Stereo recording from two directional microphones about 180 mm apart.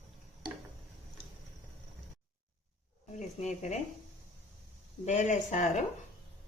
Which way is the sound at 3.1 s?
40° left (ahead or behind).